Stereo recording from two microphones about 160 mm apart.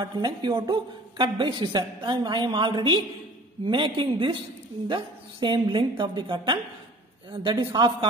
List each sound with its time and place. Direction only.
0.0 s a woman's voice: 30° right (ahead or behind)